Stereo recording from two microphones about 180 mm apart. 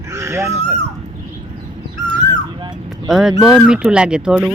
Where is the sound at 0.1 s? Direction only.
15° right (ahead or behind).